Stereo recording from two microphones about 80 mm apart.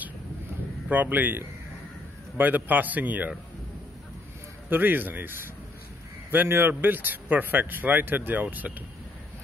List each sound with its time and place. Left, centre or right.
0.8 s speech: right
4.6 s speech: right